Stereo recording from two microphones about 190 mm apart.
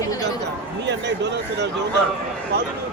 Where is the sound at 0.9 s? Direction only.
65° right (ahead or behind).